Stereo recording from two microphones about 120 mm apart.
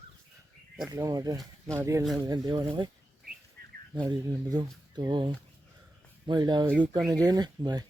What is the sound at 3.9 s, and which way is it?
Speech, 40° right (ahead or behind).